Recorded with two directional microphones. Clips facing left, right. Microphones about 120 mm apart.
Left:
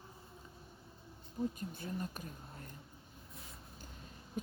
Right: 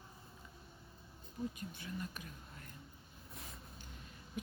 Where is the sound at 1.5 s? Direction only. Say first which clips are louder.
Left 4 dB; 40° left (ahead or behind).